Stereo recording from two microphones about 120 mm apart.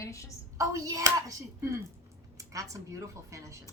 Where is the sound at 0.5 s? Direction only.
30° right (ahead or behind).